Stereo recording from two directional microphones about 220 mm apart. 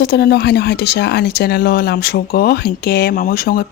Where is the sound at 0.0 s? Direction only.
50° left (ahead or behind).